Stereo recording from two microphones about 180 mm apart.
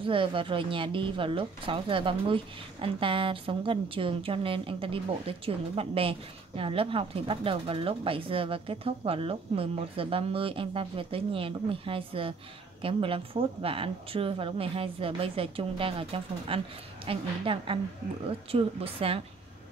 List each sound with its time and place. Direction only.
0.0 s a woman's voice: 30° right (ahead or behind)